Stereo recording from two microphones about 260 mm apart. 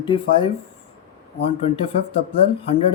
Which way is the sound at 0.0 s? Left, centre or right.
Centre.